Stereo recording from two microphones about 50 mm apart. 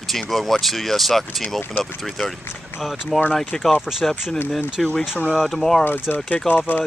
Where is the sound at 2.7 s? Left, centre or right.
Left.